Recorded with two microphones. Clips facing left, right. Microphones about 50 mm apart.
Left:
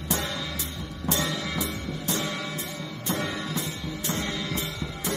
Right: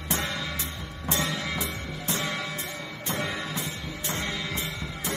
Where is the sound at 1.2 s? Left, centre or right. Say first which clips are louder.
Left 1 dB; centre.